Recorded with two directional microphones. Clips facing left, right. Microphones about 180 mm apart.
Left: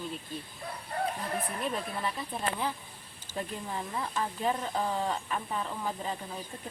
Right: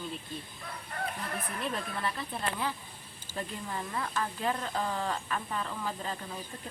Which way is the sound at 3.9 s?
15° left (ahead or behind).